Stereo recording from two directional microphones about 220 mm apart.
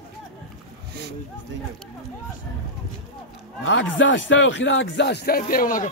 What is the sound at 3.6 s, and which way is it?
Speech, 60° left (ahead or behind).